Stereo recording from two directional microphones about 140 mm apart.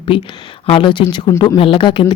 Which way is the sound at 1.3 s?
25° left (ahead or behind).